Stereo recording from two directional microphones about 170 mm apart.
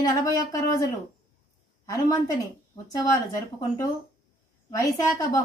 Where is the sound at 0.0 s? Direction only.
20° left (ahead or behind).